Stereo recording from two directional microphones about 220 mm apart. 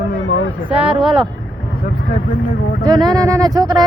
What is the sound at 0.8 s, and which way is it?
Speech, 25° right (ahead or behind).